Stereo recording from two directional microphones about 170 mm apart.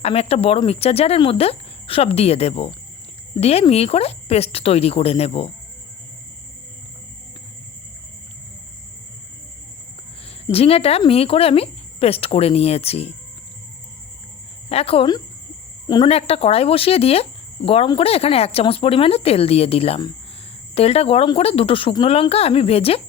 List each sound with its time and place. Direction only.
0.0 s speech: 35° left (ahead or behind)
10.5 s speech: 35° left (ahead or behind)
14.7 s speech: 35° left (ahead or behind)